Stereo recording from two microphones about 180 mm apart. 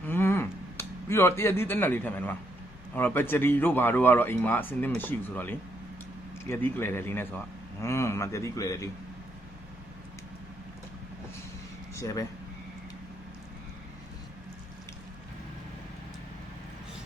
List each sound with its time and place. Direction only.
0.1 s a sound: 10° left (ahead or behind)
2.9 s a man's voice: 10° left (ahead or behind)
11.9 s speech: 15° left (ahead or behind)